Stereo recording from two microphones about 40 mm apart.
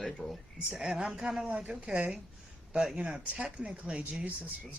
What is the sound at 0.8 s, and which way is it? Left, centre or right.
Speech, right.